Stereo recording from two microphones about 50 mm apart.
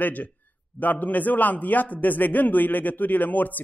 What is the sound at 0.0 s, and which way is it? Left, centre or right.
A man's voice, left.